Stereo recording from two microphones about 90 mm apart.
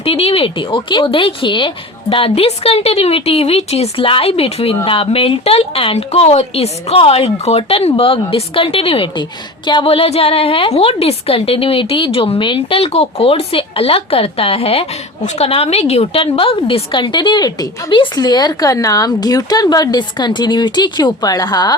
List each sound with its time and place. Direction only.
0.0 s a woman's voice: 90° left; by 17.9 s 45° left (ahead or behind)
17.9 s speech: 60° left (ahead or behind)